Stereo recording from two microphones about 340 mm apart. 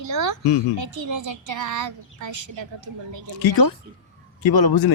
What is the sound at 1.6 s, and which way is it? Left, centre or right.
Child singing, right.